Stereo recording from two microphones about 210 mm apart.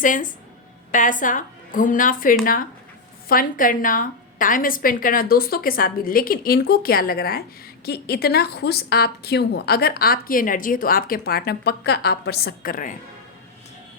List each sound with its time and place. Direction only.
0.0 s a woman's voice: 40° left (ahead or behind)